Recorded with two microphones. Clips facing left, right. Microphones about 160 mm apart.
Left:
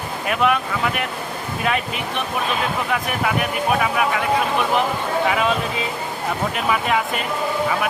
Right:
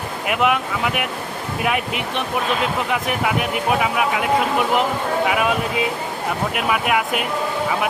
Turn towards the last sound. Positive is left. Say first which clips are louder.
# right 1 dB
turn(degrees=-10)  # may be behind; listen again after turning